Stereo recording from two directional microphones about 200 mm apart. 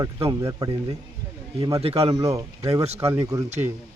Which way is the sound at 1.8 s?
30° right (ahead or behind).